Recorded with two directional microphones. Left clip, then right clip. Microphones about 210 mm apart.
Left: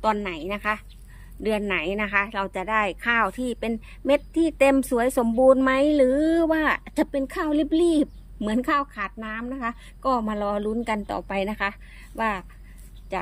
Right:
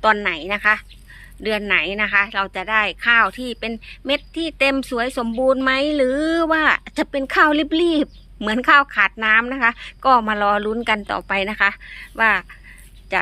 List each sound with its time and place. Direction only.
0.0 s a woman's voice: 5° left (ahead or behind)
8.9 s a woman's voice: 30° right (ahead or behind)
9.8 s a woman's voice: 5° left (ahead or behind)